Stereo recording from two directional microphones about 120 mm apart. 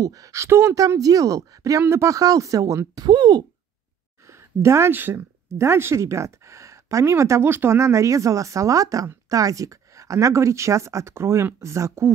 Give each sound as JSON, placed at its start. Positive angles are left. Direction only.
{"t": 0.0, "sound": "speech", "side_deg": -30}
{"t": 4.3, "sound": "speech", "side_deg": -20}